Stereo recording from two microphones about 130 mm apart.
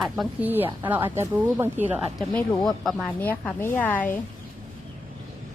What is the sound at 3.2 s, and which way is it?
Speech, 15° left (ahead or behind).